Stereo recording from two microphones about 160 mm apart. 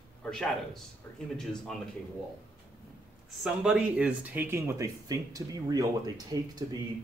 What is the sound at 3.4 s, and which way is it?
Speech, 5° right (ahead or behind).